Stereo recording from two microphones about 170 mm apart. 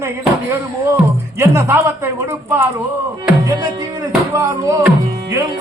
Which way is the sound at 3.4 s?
20° right (ahead or behind).